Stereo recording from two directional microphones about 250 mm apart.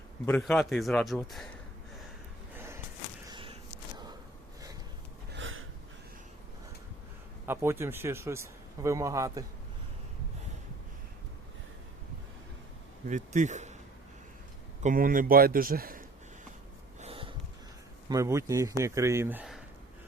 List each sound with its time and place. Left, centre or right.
0.3 s a man's voice: centre
3.2 s a sound: centre
5.3 s a sound: right
7.4 s a man's voice: centre
13.1 s speech: right
14.8 s speech: right
17.0 s wheeze: right
18.1 s a man's voice: centre